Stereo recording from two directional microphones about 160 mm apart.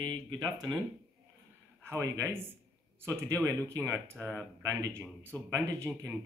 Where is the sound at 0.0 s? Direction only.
25° right (ahead or behind).